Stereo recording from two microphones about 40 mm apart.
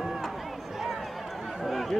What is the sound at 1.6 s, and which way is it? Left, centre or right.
Chatter, centre.